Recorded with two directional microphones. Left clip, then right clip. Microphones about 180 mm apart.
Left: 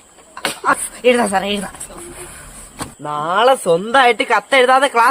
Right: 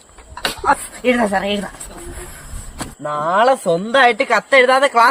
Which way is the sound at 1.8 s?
Centre (ahead or behind).